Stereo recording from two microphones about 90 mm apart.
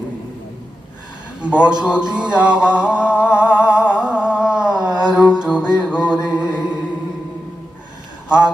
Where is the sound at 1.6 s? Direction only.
10° right (ahead or behind).